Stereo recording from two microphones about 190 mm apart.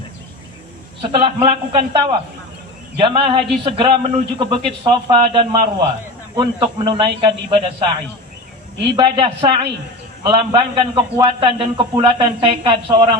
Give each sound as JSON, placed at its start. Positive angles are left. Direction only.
{"t": 1.2, "sound": "a man's voice", "side_deg": -30}
{"t": 9.0, "sound": "a man's voice", "side_deg": -25}